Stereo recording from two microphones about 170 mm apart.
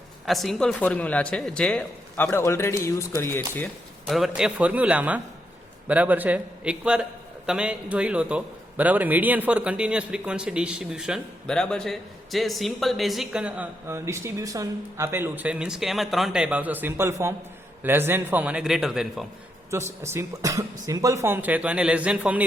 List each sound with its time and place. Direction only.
0.3 s speech: centre (ahead or behind)
4.0 s a man's voice: centre (ahead or behind)
19.7 s a man's voice: 15° right (ahead or behind)